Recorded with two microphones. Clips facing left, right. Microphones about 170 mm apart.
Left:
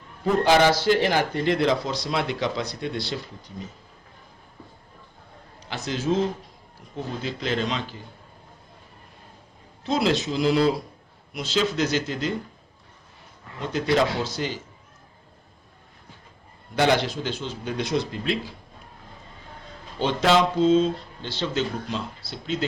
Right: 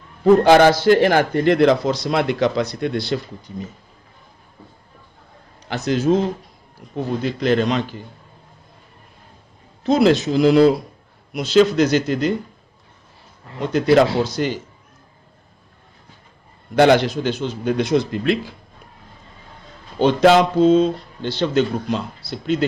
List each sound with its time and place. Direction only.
0.4 s a man's voice: 55° right (ahead or behind)
5.6 s a man's voice: 55° right (ahead or behind)
9.8 s a man's voice: 55° right (ahead or behind)
13.9 s a man's voice: 65° right (ahead or behind)
16.7 s a man's voice: 60° right (ahead or behind)
20.0 s a man's voice: 60° right (ahead or behind)